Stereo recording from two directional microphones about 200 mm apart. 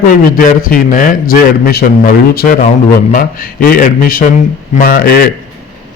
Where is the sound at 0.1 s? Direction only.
45° left (ahead or behind).